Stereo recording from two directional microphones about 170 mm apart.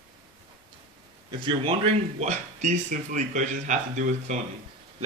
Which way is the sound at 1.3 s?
30° right (ahead or behind).